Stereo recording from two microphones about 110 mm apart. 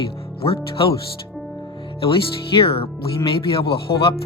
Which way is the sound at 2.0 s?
55° left (ahead or behind).